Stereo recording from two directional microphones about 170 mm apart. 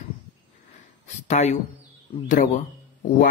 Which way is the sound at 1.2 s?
45° left (ahead or behind).